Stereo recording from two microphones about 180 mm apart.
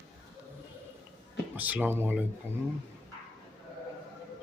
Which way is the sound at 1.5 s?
10° right (ahead or behind).